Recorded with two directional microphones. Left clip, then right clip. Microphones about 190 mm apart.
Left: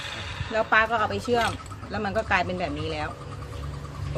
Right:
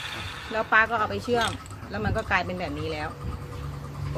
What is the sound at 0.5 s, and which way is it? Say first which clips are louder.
Speech: even; 10° left (ahead or behind).